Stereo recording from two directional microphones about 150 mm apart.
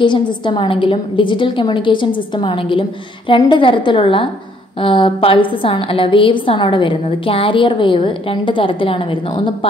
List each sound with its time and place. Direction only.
0.0 s a woman's voice: 30° left (ahead or behind)